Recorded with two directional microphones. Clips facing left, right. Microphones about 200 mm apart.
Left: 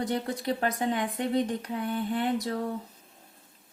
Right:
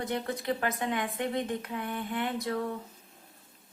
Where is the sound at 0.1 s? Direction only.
35° left (ahead or behind).